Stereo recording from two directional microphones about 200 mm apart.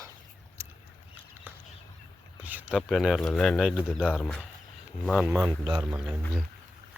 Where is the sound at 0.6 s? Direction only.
15° right (ahead or behind).